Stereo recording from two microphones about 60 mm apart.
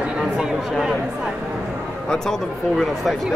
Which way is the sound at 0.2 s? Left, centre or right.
Centre.